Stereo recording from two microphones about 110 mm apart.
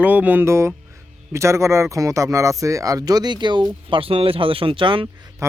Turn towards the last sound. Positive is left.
turn(degrees=-50)  # may be behind; listen again after turning